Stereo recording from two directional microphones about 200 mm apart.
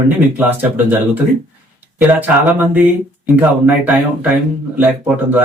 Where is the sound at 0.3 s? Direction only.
10° right (ahead or behind).